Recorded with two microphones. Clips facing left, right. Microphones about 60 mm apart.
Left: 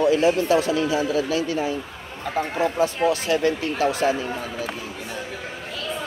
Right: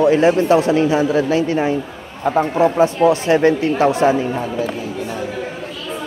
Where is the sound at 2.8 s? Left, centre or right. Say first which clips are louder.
Right 7 dB; right.